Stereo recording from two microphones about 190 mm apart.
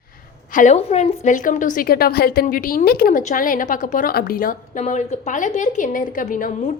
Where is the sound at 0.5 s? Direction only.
40° left (ahead or behind).